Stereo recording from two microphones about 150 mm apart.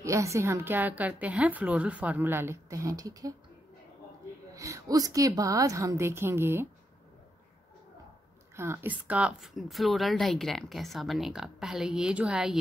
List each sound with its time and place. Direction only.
0.0 s a woman's voice: 20° right (ahead or behind)
4.6 s a woman's voice: 20° right (ahead or behind)
8.5 s a woman's voice: 15° right (ahead or behind)